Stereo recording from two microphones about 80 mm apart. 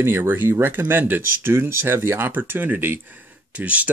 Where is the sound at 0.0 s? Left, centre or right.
Right.